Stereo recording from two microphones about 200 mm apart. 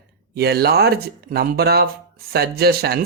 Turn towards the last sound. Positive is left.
turn(degrees=-50)  # may be behind; listen again after turning